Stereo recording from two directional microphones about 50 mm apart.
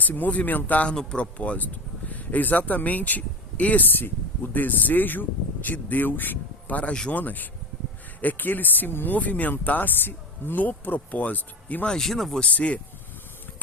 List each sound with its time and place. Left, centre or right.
0.0 s speech: left
0.9 s speech: left
3.8 s speech: left
9.1 s speech: left
11.9 s speech: centre
12.4 s speech: left